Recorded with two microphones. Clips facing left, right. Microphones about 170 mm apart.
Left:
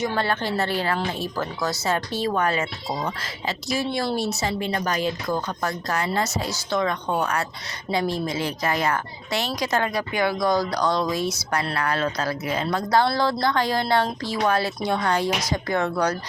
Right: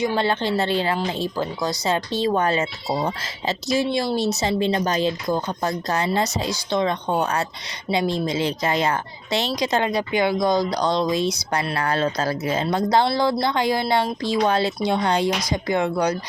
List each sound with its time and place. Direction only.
0.0 s a woman's voice: 15° right (ahead or behind)
15.3 s speech: 10° left (ahead or behind)
15.6 s speech: 15° right (ahead or behind)